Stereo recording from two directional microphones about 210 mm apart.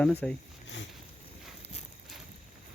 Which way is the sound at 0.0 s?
5° left (ahead or behind).